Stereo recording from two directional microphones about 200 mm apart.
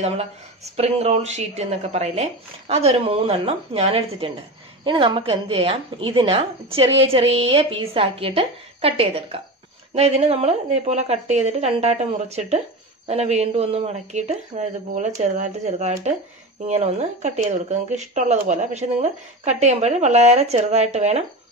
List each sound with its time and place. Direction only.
0.7 s a woman's voice: 30° right (ahead or behind)